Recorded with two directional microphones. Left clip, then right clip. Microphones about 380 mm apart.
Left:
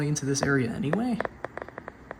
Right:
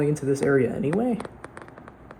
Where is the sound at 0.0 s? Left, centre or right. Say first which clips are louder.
Right 5 dB; centre.